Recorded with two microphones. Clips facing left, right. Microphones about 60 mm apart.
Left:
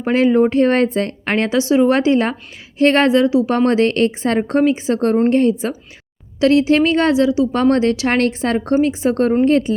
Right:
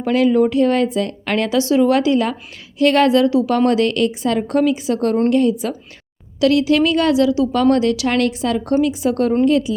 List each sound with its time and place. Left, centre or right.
0.0 s speech: left
3.7 s speech: left